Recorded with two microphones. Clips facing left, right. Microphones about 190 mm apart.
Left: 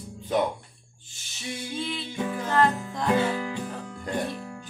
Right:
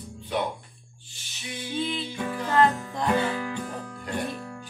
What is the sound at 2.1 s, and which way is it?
Music, 20° left (ahead or behind).